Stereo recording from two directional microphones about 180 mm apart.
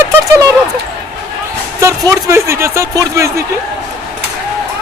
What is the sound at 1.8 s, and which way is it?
Speech, 15° right (ahead or behind).